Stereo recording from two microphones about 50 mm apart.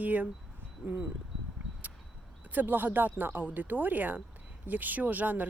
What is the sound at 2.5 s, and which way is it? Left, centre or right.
Speech, right.